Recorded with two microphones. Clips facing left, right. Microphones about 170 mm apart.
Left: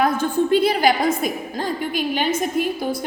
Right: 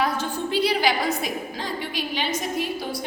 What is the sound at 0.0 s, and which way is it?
A woman's voice, 50° left (ahead or behind).